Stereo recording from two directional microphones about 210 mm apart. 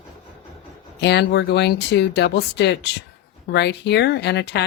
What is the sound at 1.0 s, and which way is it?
Speech, 55° left (ahead or behind).